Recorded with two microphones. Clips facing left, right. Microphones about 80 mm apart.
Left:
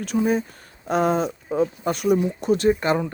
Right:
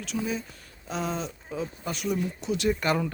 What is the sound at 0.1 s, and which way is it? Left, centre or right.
Speech, left.